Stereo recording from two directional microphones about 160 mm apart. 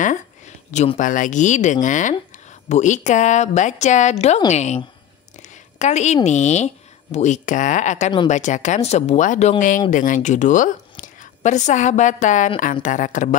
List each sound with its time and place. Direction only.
0.7 s a woman's voice: 50° left (ahead or behind)